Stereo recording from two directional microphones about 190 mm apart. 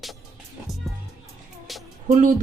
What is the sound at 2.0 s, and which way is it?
Speech, 45° right (ahead or behind).